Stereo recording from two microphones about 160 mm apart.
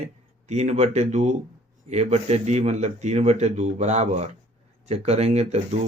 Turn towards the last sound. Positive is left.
turn(degrees=-45)  # may be behind; listen again after turning